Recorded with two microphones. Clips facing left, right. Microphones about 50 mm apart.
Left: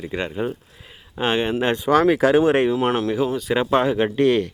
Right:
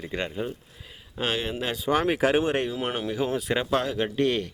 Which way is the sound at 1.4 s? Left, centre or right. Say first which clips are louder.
Left 9 dB; left.